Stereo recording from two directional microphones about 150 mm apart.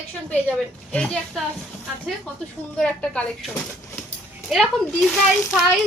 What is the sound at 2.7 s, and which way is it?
Speech, 10° left (ahead or behind).